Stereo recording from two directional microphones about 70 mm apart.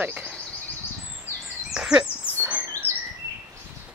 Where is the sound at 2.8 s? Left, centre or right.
Right.